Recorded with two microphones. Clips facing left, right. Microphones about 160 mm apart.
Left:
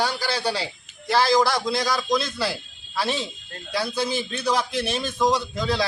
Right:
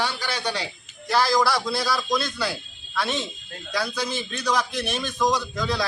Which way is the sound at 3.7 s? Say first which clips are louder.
Left 2 dB; 30° left (ahead or behind).